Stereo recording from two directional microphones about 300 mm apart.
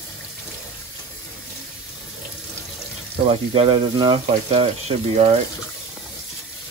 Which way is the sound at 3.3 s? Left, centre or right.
Centre.